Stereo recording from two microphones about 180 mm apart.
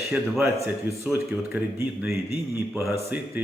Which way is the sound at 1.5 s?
15° right (ahead or behind).